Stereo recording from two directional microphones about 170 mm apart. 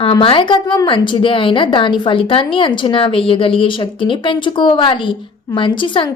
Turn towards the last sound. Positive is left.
turn(degrees=30)  # may be behind; listen again after turning